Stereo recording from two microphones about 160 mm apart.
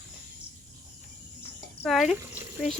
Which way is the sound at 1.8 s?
Centre (ahead or behind).